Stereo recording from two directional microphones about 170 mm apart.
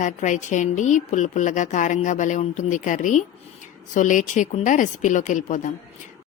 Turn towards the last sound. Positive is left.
turn(degrees=45)  # may be behind; listen again after turning